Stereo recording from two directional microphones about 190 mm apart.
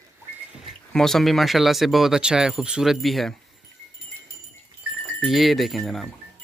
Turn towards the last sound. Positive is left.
turn(degrees=0)  # may be behind; listen again after turning